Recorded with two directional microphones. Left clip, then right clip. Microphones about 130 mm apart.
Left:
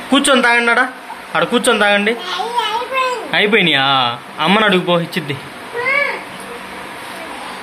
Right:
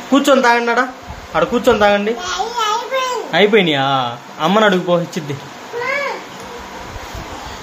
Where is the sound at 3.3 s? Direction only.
15° right (ahead or behind).